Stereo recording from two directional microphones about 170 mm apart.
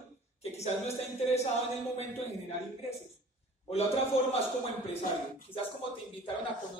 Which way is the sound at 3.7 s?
35° left (ahead or behind).